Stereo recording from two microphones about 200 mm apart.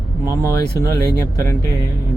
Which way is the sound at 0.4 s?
15° left (ahead or behind).